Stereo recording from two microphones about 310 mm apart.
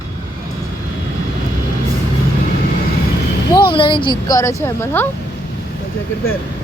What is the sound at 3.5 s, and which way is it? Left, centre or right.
Speech, centre.